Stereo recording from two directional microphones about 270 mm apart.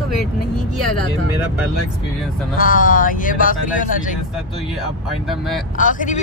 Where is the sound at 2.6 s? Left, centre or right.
Left.